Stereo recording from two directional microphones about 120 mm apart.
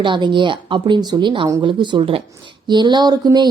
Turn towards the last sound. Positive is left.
turn(degrees=-35)  # may be behind; listen again after turning